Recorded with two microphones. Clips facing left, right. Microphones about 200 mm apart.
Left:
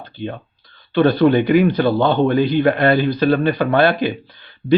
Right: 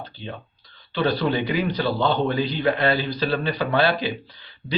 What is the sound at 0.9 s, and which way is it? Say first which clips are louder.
A man's voice: left 9 dB; 55° left (ahead or behind).